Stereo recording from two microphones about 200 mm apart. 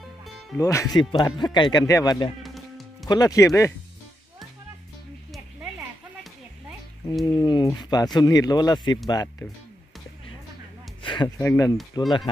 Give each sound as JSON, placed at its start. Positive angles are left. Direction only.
{"t": 0.6, "sound": "speech", "side_deg": 15}
{"t": 2.4, "sound": "music", "side_deg": 0}
{"t": 3.1, "sound": "speech", "side_deg": 20}
{"t": 7.3, "sound": "speech", "side_deg": 20}
{"t": 11.0, "sound": "speech", "side_deg": 25}